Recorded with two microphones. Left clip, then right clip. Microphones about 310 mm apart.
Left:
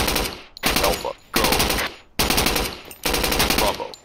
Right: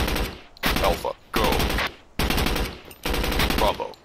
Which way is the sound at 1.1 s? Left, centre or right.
Centre.